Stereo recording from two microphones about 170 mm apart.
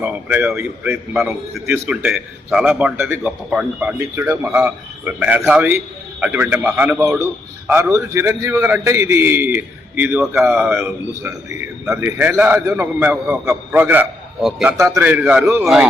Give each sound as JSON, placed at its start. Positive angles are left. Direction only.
{"t": 0.0, "sound": "a man's voice", "side_deg": -10}
{"t": 14.8, "sound": "a man's voice", "side_deg": -15}